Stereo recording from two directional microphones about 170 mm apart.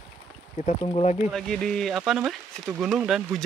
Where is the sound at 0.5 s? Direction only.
35° left (ahead or behind).